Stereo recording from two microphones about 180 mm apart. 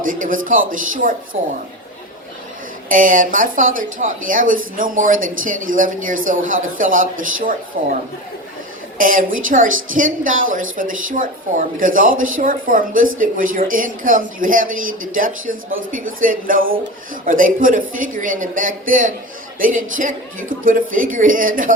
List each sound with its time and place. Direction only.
0.0 s speech: 50° right (ahead or behind)
2.9 s speech: 50° right (ahead or behind)
9.0 s a woman's voice: 50° right (ahead or behind)